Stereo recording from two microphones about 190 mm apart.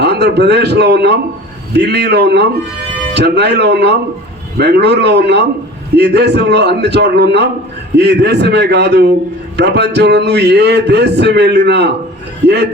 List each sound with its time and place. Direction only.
0.0 s speech: 60° right (ahead or behind)